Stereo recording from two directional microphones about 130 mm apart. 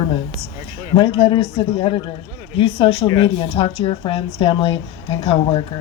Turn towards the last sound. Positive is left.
turn(degrees=45)  # may be behind; listen again after turning